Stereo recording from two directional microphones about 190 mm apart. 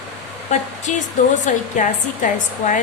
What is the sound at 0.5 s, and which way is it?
A woman's voice, 40° left (ahead or behind).